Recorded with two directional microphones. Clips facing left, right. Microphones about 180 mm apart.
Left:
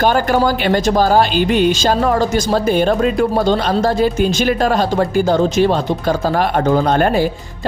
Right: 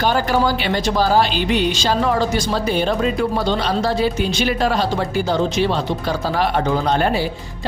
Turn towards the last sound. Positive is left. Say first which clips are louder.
# left 4 dB
turn(degrees=50)  # may be behind; listen again after turning